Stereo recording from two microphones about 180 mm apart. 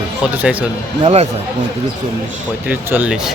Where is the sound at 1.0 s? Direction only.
35° right (ahead or behind).